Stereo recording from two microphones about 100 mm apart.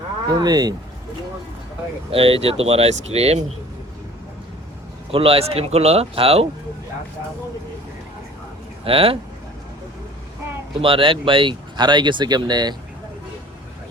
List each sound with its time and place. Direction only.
0.3 s speech: 40° right (ahead or behind)
2.0 s speech: 70° right (ahead or behind); by 3.3 s 90° right
5.1 s speech: 70° right (ahead or behind)
8.8 s speech: 70° right (ahead or behind)
10.8 s speech: 60° right (ahead or behind); by 12.7 s 45° right (ahead or behind)